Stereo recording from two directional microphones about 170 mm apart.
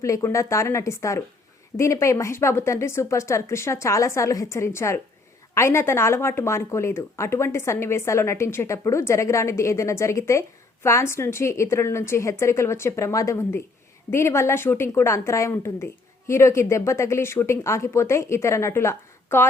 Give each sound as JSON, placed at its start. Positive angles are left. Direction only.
{"t": 0.0, "sound": "a woman's voice", "side_deg": 15}